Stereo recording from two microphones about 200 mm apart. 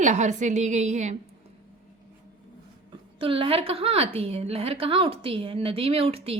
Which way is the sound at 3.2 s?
25° right (ahead or behind).